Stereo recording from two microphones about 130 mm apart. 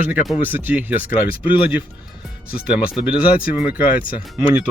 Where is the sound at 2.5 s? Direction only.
10° right (ahead or behind).